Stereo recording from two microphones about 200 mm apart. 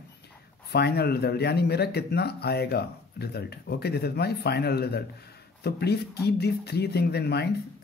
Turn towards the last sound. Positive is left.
turn(degrees=55)  # may be behind; listen again after turning